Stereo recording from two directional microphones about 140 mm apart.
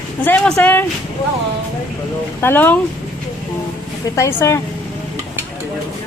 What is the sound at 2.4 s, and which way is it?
Speech, 15° left (ahead or behind).